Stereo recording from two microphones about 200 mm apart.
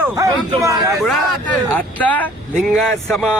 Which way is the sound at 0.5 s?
15° right (ahead or behind).